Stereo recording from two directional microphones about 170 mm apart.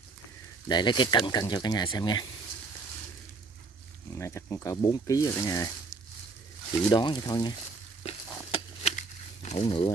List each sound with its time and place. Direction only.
0.7 s speech: 25° left (ahead or behind)
4.2 s speech: 15° left (ahead or behind)
6.9 s speech: 25° left (ahead or behind)
8.5 s a sound: 35° left (ahead or behind)
8.9 s crumpling: 40° left (ahead or behind)